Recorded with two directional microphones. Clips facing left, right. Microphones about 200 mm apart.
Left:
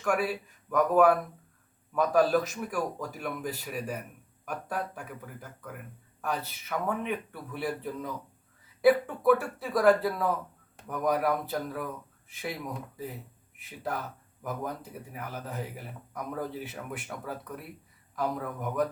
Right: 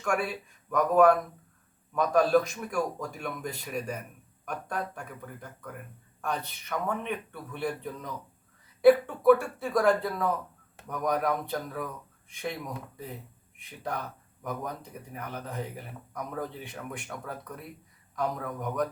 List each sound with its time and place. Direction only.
0.0 s speech: 5° left (ahead or behind)
13.6 s speech: 5° left (ahead or behind)